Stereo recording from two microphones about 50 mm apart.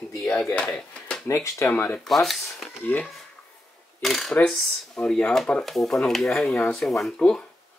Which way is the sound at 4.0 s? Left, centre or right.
Centre.